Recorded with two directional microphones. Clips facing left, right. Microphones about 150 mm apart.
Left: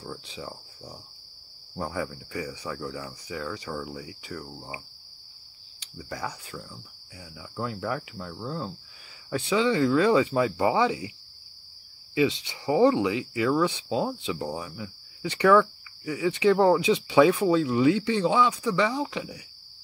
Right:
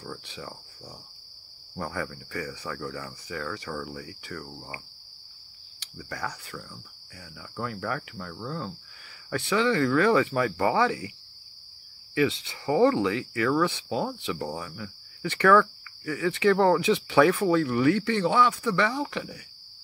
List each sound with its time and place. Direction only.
0.3 s cricket: 15° left (ahead or behind)
1.8 s speech: 15° left (ahead or behind)
5.9 s speech: 15° left (ahead or behind)
7.2 s cricket: 20° left (ahead or behind)
9.3 s speech: 15° left (ahead or behind)
12.2 s speech: 15° left (ahead or behind)